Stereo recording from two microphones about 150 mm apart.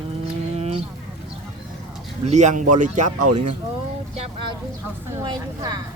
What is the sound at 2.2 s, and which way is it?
Speech, 50° right (ahead or behind).